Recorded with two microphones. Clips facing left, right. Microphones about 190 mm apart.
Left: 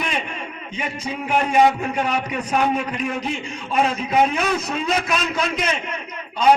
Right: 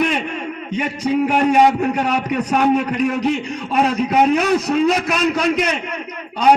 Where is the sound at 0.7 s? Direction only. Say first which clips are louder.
Right 9 dB; 70° right (ahead or behind).